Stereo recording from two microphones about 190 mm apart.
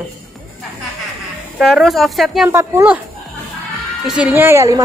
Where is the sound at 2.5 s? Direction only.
15° right (ahead or behind).